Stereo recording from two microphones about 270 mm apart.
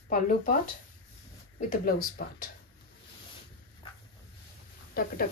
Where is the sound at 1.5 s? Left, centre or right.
Left.